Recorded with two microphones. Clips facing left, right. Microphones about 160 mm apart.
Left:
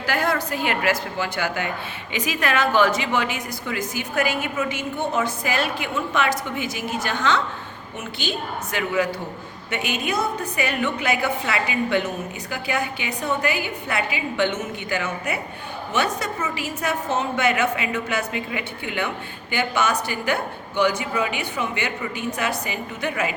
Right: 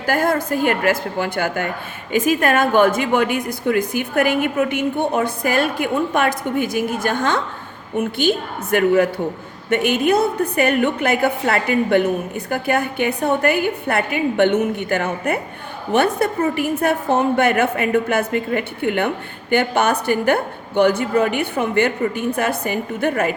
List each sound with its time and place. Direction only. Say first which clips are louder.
0.0 s a woman's voice: right 5 dB; 50° right (ahead or behind)